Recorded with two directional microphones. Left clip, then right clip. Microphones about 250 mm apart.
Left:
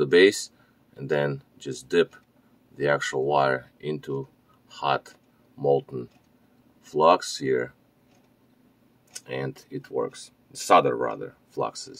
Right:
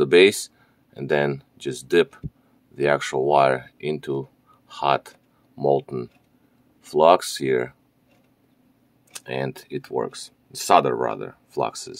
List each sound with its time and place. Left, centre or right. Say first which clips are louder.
0.0 s speech: right 3 dB; right
9.2 s speech: right 4 dB; right